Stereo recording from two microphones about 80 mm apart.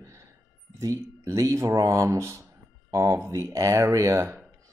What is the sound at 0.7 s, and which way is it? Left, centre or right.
Speech, right.